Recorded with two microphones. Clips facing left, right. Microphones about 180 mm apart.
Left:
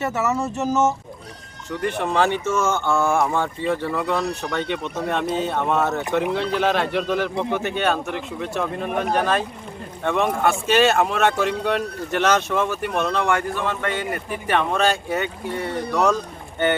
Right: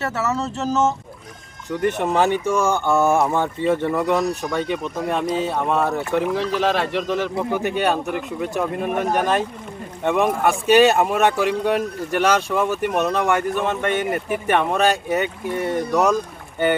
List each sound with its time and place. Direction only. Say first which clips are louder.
0.0 s speech: left 1 dB; 15° left (ahead or behind)
1.7 s speech: right 3 dB; 15° right (ahead or behind)
7.6 s speech: right 2 dB; 15° right (ahead or behind)